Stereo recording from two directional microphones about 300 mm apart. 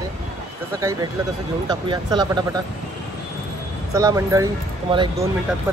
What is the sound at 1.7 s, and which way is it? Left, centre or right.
Speech, centre.